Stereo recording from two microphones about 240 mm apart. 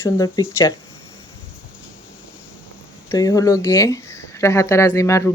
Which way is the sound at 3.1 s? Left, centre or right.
Centre.